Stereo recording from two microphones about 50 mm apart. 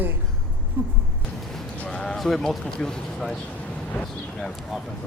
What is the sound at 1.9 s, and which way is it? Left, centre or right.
Speech, centre.